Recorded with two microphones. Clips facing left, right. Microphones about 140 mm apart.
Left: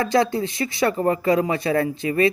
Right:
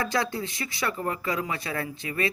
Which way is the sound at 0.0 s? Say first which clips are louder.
Left 8 dB; 25° left (ahead or behind).